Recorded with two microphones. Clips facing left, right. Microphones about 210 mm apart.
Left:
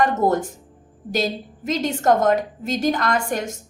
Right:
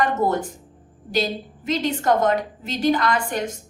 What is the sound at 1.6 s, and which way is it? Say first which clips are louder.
A woman's voice: left 2 dB; 45° left (ahead or behind).